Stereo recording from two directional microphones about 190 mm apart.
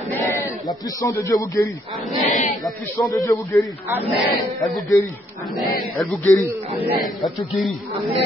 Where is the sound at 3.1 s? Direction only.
15° left (ahead or behind).